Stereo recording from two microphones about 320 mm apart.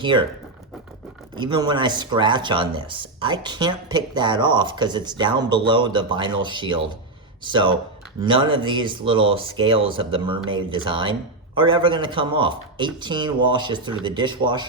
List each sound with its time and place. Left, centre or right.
0.0 s speech: centre
1.4 s speech: centre